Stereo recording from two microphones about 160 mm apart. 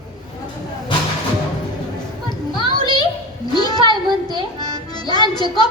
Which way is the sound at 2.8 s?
25° left (ahead or behind).